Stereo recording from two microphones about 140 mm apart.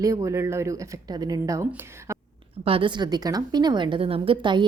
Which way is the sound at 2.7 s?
35° right (ahead or behind).